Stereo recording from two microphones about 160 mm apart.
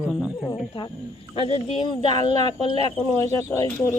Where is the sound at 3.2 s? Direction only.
15° left (ahead or behind).